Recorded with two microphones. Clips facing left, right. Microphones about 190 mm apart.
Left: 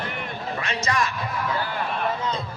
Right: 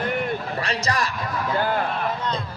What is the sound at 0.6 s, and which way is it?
Speech, 35° right (ahead or behind).